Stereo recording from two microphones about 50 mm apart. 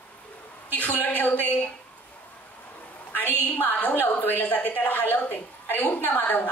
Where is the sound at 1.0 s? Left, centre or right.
Left.